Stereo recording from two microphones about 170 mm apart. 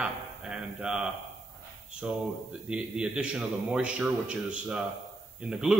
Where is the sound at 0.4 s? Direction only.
5° right (ahead or behind).